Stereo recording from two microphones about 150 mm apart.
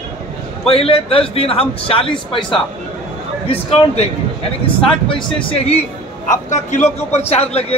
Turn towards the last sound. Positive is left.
turn(degrees=45)  # may be behind; listen again after turning